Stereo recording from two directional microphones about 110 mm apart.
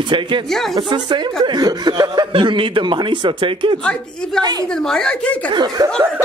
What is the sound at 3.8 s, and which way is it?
A woman's voice, 5° left (ahead or behind).